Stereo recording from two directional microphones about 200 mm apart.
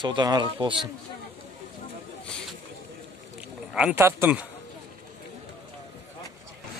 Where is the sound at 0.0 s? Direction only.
20° right (ahead or behind).